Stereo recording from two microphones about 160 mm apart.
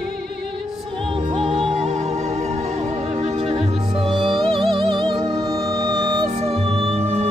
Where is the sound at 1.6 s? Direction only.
40° right (ahead or behind).